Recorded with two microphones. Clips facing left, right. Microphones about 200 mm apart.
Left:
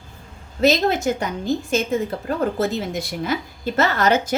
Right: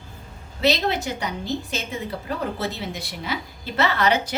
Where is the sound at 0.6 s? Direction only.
45° left (ahead or behind).